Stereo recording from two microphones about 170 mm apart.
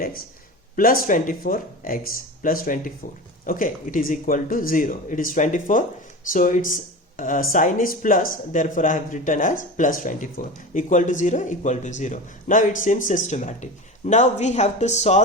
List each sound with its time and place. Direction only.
0.8 s speech: 55° left (ahead or behind)